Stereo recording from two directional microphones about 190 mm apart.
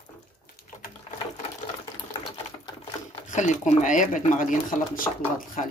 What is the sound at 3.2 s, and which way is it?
Speech, 40° left (ahead or behind).